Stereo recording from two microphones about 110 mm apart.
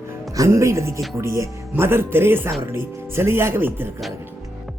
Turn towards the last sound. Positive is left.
turn(degrees=-20)  # may be behind; listen again after turning